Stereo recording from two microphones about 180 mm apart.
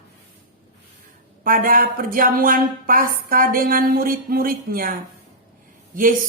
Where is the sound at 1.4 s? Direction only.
50° right (ahead or behind).